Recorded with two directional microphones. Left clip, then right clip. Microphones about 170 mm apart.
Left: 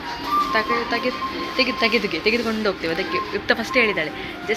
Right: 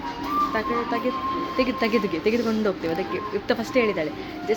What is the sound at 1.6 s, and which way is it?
Speech, 20° right (ahead or behind).